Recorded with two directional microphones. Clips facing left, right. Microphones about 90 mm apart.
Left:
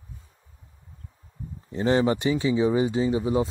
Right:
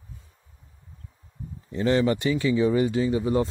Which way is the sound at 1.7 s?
25° left (ahead or behind).